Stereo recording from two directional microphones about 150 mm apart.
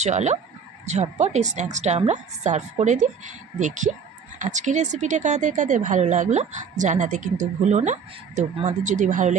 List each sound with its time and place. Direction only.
0.0 s speech: 50° right (ahead or behind)